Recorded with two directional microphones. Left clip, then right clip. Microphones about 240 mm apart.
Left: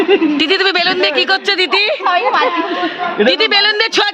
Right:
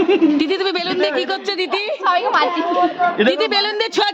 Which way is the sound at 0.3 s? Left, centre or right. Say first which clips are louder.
Left 6 dB; centre.